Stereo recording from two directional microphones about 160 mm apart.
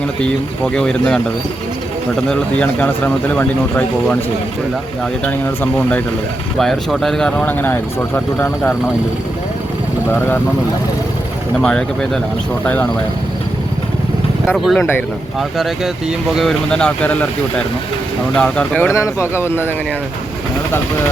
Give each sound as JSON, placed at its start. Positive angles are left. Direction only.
{"t": 0.2, "sound": "speech", "side_deg": 5}
{"t": 2.2, "sound": "speech", "side_deg": 5}
{"t": 6.6, "sound": "speech", "side_deg": 0}
{"t": 10.1, "sound": "speech", "side_deg": 10}
{"t": 11.5, "sound": "speech", "side_deg": 5}
{"t": 14.4, "sound": "speech", "side_deg": 0}
{"t": 18.3, "sound": "speech", "side_deg": 5}